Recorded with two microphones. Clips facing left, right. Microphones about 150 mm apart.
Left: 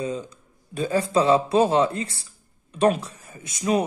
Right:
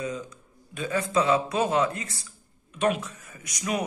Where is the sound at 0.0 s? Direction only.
30° left (ahead or behind).